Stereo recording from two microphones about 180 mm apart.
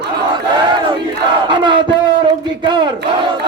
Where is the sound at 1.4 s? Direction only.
25° right (ahead or behind).